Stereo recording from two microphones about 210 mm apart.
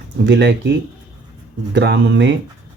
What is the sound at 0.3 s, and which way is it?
Speech, 55° right (ahead or behind).